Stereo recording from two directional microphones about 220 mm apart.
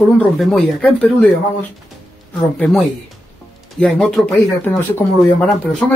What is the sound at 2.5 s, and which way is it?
Speech, 5° left (ahead or behind).